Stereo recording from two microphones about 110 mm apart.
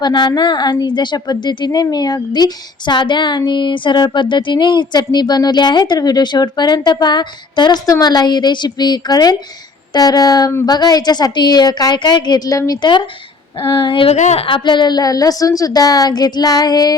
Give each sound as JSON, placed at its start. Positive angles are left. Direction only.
{"t": 0.0, "sound": "speech", "side_deg": 40}
{"t": 14.1, "sound": "a woman's voice", "side_deg": 80}
{"t": 14.4, "sound": "speech", "side_deg": 45}